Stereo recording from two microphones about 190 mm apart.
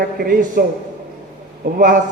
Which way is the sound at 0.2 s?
50° right (ahead or behind).